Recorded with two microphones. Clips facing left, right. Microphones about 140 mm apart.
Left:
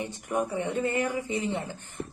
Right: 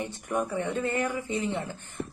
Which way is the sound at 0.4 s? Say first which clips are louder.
Left 1 dB; 15° left (ahead or behind).